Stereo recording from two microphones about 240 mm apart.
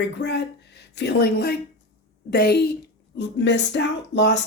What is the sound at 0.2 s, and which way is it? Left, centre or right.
Speech, left.